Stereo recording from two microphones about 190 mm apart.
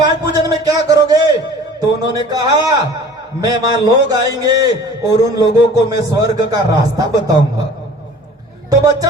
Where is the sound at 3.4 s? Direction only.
20° right (ahead or behind).